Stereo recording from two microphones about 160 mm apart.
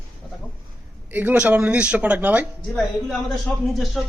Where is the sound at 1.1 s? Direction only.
10° right (ahead or behind).